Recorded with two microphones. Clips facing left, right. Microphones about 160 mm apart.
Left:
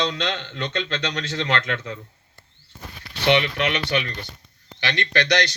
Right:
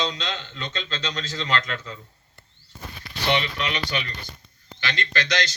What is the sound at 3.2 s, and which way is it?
Speech, 65° left (ahead or behind).